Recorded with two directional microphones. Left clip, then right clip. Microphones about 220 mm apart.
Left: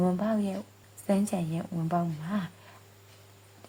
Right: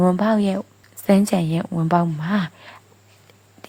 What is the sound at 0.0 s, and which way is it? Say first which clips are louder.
Speech: right 11 dB; 30° right (ahead or behind).